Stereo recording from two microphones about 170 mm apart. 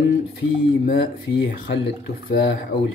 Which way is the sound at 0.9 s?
90° left.